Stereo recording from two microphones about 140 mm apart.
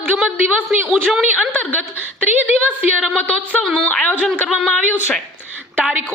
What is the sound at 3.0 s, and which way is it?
Speech, 5° left (ahead or behind).